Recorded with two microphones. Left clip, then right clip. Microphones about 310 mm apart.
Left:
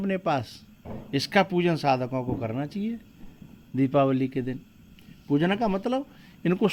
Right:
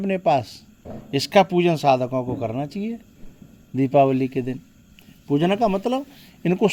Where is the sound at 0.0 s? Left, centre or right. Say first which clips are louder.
Right 7 dB; right.